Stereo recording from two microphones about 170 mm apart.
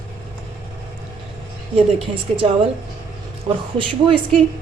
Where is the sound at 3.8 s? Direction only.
30° right (ahead or behind).